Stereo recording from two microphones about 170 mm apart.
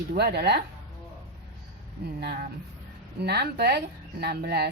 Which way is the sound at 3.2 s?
75° right (ahead or behind).